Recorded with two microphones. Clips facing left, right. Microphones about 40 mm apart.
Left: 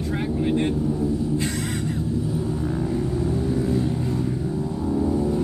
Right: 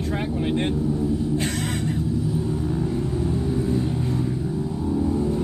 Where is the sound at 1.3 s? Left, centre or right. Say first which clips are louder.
Even; right.